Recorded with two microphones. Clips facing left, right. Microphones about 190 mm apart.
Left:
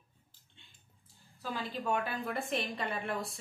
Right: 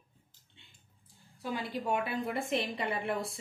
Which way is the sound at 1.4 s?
15° right (ahead or behind).